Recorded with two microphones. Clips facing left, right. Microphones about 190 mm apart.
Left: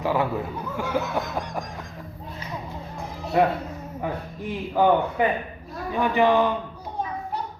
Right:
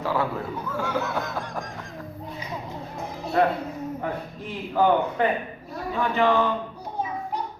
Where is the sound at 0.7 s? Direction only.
15° left (ahead or behind).